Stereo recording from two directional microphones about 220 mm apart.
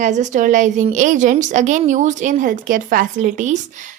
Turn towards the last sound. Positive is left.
turn(degrees=-35)  # may be behind; listen again after turning